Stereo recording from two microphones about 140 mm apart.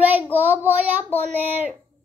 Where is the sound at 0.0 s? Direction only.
15° right (ahead or behind).